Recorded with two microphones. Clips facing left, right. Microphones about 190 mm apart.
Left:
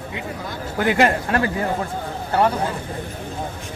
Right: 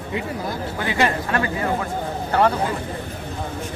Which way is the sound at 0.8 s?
50° left (ahead or behind).